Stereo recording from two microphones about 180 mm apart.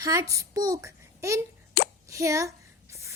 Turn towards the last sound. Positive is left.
turn(degrees=-15)  # may be behind; listen again after turning